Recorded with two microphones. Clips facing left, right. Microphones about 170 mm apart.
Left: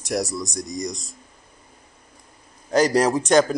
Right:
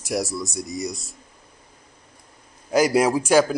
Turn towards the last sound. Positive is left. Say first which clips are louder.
# even
turn(degrees=-5)  # may be behind; listen again after turning